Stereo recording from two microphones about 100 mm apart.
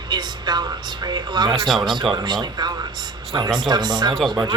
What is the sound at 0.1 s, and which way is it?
Speech, 45° right (ahead or behind).